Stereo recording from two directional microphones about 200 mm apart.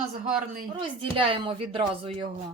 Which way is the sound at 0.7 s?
25° right (ahead or behind).